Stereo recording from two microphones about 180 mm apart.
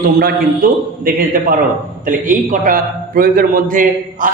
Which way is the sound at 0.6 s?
55° right (ahead or behind).